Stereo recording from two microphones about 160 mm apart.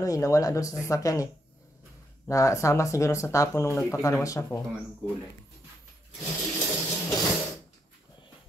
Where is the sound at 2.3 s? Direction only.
20° left (ahead or behind).